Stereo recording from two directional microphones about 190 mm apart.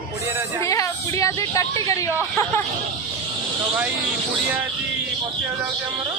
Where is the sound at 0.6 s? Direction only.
15° left (ahead or behind).